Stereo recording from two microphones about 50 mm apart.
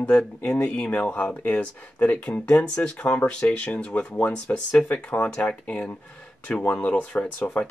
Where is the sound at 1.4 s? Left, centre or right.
Left.